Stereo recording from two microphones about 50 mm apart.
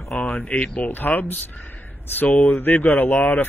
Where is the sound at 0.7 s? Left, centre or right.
Left.